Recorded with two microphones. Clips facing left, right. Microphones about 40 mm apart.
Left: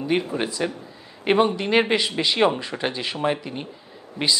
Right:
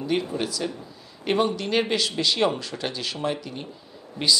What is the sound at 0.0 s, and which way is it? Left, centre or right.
Speech, left.